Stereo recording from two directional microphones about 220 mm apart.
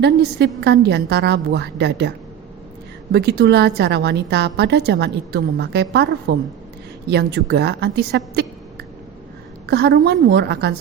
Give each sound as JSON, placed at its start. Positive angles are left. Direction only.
{"t": 0.0, "sound": "a woman's voice", "side_deg": -50}